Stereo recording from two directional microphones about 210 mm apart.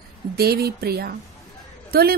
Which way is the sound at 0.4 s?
50° right (ahead or behind).